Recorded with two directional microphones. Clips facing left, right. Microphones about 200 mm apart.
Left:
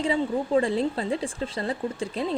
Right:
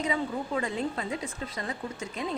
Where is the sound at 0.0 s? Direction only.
30° left (ahead or behind).